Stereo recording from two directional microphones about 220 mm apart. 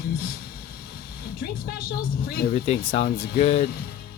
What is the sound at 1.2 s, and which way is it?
Speech, 45° left (ahead or behind).